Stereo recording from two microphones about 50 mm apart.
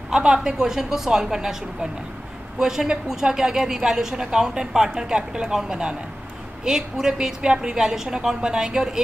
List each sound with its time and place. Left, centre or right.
0.1 s a woman's voice: centre